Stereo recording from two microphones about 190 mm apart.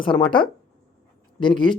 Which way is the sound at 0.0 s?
25° left (ahead or behind).